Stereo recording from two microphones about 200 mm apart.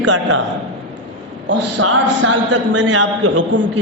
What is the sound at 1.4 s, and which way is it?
A man's voice, 65° right (ahead or behind).